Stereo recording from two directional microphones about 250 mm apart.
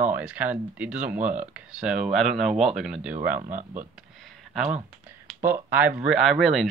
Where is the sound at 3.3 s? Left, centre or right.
Right.